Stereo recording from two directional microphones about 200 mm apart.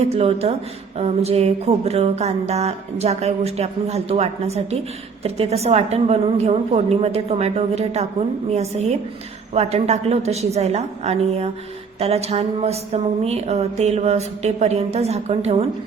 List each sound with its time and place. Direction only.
0.1 s music: 30° right (ahead or behind)